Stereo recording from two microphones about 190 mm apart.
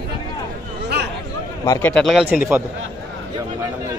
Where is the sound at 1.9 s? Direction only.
Centre (ahead or behind).